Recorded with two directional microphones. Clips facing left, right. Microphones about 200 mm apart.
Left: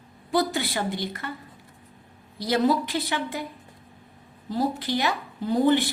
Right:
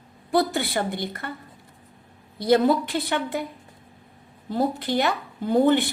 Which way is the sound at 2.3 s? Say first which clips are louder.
Right 4 dB; 55° right (ahead or behind).